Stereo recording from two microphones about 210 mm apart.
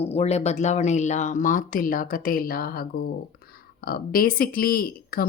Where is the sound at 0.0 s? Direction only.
30° left (ahead or behind).